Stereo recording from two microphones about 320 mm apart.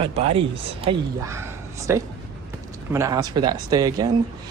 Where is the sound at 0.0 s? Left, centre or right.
Centre.